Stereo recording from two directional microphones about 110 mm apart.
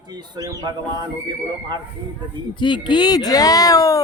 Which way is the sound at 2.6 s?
45° left (ahead or behind).